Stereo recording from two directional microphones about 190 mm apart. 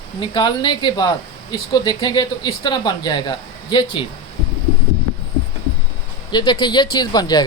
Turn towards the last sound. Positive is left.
turn(degrees=20)  # may be behind; listen again after turning